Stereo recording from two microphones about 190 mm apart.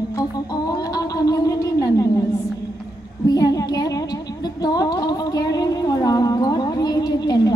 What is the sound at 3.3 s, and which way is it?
Child singing, 20° left (ahead or behind).